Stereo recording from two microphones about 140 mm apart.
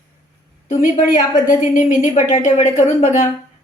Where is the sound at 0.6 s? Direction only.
75° left (ahead or behind).